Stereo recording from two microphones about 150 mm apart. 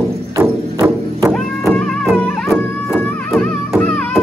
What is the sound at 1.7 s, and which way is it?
Music, 5° left (ahead or behind).